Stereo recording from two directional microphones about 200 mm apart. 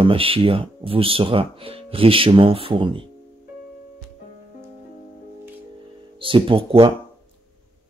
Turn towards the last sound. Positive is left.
turn(degrees=-25)  # may be behind; listen again after turning